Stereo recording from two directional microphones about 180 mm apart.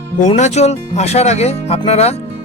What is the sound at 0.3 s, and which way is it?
Speech, 40° left (ahead or behind).